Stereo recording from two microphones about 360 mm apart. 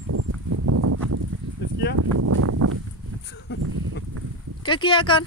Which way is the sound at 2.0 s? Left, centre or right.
Right.